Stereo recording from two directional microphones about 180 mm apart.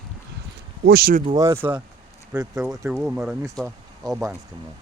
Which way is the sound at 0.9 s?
55° right (ahead or behind).